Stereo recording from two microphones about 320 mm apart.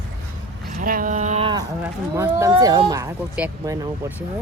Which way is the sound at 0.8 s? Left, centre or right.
Right.